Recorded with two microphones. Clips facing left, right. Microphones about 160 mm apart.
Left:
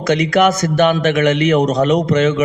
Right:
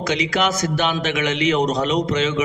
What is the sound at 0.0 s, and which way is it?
A man's voice, 55° left (ahead or behind).